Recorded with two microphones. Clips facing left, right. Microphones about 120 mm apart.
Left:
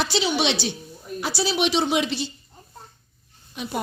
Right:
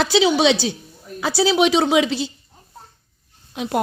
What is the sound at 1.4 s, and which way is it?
Speech, 90° right.